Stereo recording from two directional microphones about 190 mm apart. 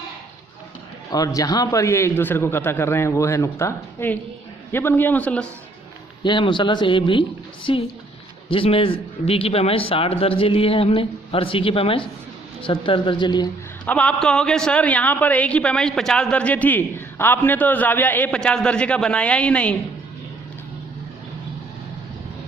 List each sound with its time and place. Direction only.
1.1 s a man's voice: 20° left (ahead or behind)
6.2 s a man's voice: 25° left (ahead or behind)
13.8 s a man's voice: 5° left (ahead or behind)